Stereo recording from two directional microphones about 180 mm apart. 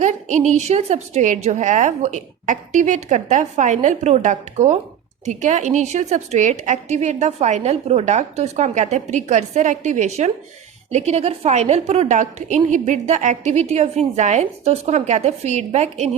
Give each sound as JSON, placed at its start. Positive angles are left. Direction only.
{"t": 0.0, "sound": "a woman's voice", "side_deg": -40}